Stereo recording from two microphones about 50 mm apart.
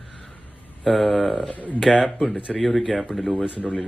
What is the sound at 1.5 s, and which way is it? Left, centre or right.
Speech, left.